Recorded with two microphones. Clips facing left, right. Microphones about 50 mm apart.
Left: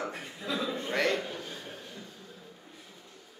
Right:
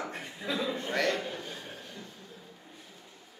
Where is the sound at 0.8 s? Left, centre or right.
Left.